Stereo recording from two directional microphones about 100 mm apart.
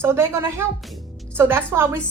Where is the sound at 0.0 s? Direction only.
25° right (ahead or behind).